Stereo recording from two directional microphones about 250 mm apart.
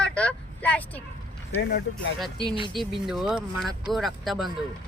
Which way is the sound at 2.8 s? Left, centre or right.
Centre.